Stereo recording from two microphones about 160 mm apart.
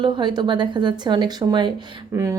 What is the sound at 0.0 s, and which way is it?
A woman's voice, 30° right (ahead or behind).